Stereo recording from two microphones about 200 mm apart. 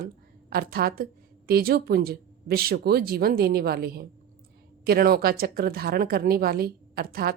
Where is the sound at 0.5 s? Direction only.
50° right (ahead or behind).